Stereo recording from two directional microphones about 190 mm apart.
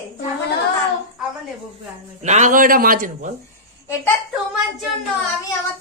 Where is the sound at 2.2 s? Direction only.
40° right (ahead or behind).